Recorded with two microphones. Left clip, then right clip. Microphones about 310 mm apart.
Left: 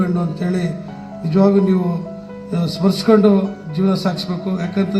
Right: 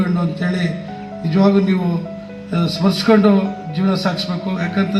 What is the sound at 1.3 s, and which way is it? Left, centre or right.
Speech, left.